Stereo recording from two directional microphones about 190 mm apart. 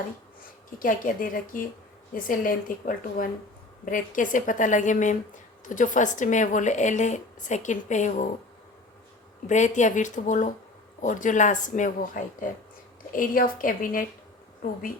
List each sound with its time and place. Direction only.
0.8 s speech: 45° left (ahead or behind)
9.5 s speech: 40° left (ahead or behind)